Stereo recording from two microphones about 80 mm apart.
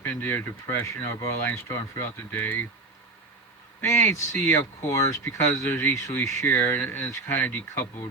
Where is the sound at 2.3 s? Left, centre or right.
Left.